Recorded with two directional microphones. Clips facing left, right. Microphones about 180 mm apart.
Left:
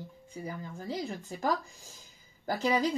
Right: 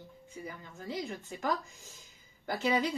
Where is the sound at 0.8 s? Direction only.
35° left (ahead or behind).